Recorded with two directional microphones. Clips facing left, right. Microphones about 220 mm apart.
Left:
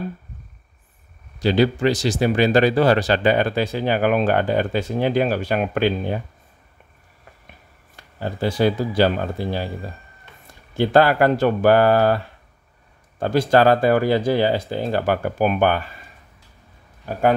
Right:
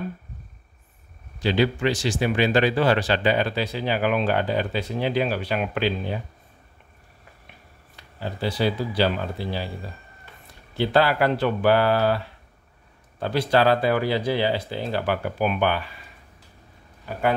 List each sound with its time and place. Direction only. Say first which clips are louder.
1.4 s speech: left 4 dB; 40° left (ahead or behind)
7.9 s speech: left 4 dB; 50° left (ahead or behind)
10.8 s speech: left 5 dB; 50° left (ahead or behind)
13.2 s speech: left 4 dB; 45° left (ahead or behind)